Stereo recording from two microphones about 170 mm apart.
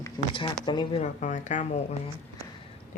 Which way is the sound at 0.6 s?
25° left (ahead or behind).